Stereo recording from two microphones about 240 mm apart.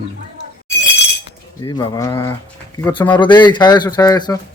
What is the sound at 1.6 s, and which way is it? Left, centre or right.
Speech, centre.